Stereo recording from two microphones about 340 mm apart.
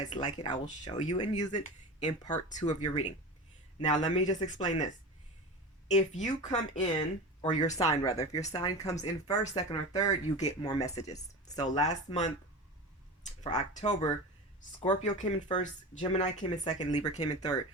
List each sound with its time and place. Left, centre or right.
0.0 s speech: left
4.0 s speech: left
7.9 s speech: centre